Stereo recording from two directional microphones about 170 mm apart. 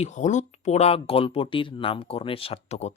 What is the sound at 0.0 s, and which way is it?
Speech, 45° left (ahead or behind).